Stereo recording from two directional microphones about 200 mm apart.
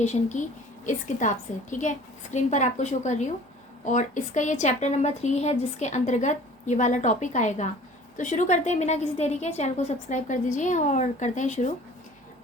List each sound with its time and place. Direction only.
0.0 s a woman's voice: 35° left (ahead or behind)